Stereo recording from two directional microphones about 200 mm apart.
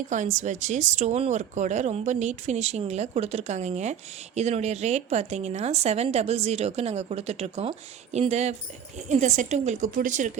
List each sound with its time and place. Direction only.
0.1 s a woman's voice: 35° right (ahead or behind)